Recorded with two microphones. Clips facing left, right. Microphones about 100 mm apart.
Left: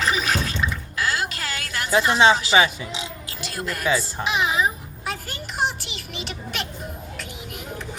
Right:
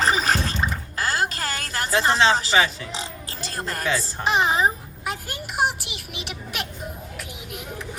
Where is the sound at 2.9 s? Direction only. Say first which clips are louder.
Even; 35° right (ahead or behind).